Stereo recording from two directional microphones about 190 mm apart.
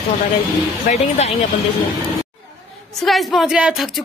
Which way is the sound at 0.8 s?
35° left (ahead or behind).